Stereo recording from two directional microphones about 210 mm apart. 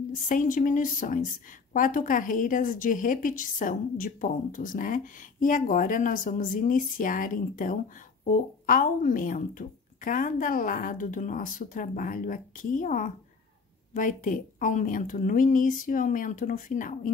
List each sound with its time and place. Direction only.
0.1 s a woman's voice: 40° left (ahead or behind)